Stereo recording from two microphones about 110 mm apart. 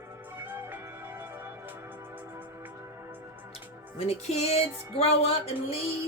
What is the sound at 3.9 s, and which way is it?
Music, 70° left (ahead or behind).